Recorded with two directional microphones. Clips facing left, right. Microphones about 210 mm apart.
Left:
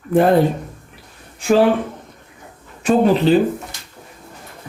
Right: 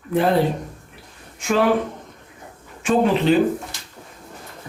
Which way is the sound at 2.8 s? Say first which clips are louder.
Left 3 dB; 35° left (ahead or behind).